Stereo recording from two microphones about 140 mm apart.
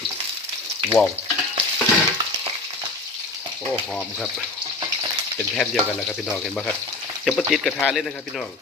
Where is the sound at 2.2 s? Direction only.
30° right (ahead or behind).